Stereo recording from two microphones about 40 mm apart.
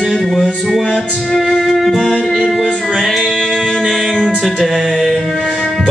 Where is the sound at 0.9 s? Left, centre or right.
Left.